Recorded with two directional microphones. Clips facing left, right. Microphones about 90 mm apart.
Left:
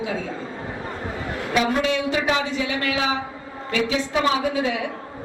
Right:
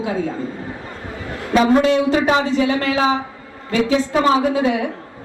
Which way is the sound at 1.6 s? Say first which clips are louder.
Right 8 dB; 35° right (ahead or behind).